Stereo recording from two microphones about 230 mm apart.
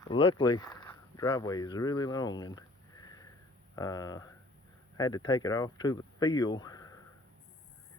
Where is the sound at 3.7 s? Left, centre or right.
Centre.